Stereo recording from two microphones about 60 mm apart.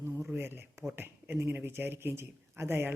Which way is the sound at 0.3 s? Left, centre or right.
Right.